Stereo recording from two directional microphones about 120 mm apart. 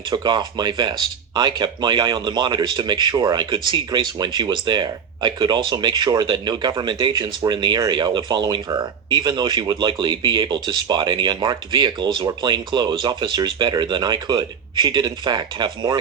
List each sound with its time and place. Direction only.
0.1 s speech: 35° right (ahead or behind)